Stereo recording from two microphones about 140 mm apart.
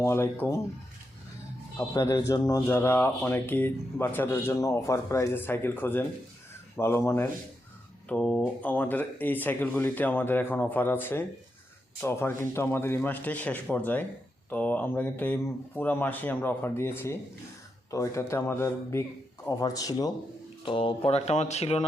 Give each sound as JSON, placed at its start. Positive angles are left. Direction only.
{"t": 0.0, "sound": "speech", "side_deg": 20}
{"t": 1.9, "sound": "speech", "side_deg": 25}
{"t": 20.7, "sound": "speech", "side_deg": 40}